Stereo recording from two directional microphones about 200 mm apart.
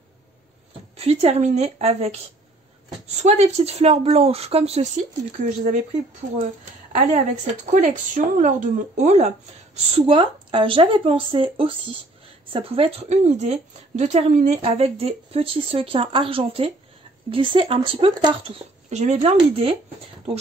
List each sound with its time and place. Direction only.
0.9 s speech: 30° right (ahead or behind)
3.2 s speech: 35° right (ahead or behind)
18.9 s speech: 35° right (ahead or behind)